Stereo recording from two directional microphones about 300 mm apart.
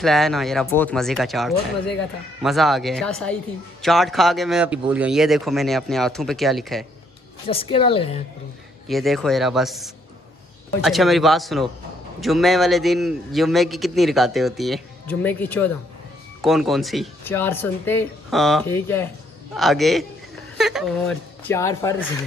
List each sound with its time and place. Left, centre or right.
0.0 s a man's voice: centre
7.7 s a woman's voice: centre
8.8 s a man's voice: centre